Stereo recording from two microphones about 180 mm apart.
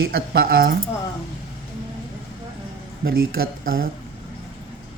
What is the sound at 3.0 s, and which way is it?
Speech, 55° right (ahead or behind).